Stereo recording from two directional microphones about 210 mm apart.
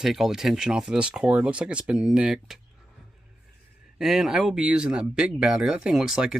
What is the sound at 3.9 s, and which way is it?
Speech, centre (ahead or behind).